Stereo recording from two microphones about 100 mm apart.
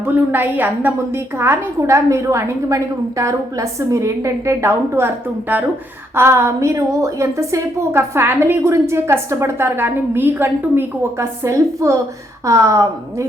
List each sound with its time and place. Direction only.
0.0 s a woman's voice: 20° right (ahead or behind)